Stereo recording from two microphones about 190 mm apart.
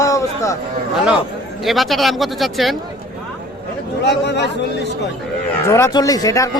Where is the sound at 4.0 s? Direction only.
65° left (ahead or behind).